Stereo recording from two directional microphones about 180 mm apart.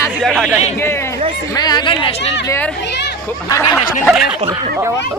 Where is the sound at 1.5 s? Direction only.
25° left (ahead or behind).